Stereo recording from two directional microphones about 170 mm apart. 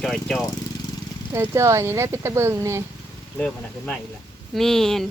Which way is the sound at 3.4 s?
5° left (ahead or behind).